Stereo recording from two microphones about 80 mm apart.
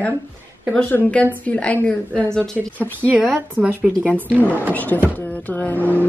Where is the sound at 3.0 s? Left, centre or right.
Centre.